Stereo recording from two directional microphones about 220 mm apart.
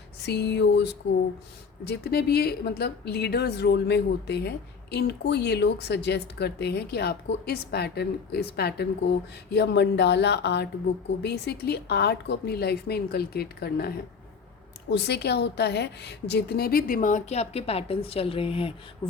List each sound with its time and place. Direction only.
0.2 s a woman's voice: 50° left (ahead or behind); by 18.7 s 25° left (ahead or behind)